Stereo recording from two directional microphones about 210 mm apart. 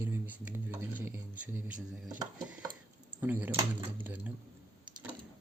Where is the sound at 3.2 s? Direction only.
10° right (ahead or behind).